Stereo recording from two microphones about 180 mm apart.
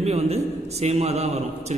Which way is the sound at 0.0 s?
35° right (ahead or behind).